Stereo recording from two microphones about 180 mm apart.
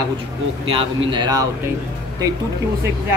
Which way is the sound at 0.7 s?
30° right (ahead or behind).